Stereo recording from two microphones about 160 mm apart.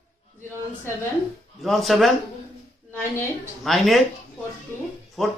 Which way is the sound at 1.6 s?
Centre (ahead or behind).